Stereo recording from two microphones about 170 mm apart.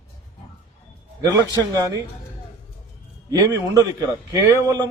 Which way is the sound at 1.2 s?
20° right (ahead or behind).